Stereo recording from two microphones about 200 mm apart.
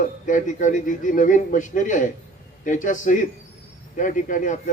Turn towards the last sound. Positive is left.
turn(degrees=40)  # may be behind; listen again after turning